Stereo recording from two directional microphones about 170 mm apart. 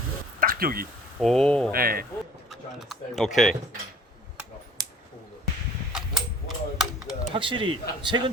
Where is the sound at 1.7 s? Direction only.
60° right (ahead or behind).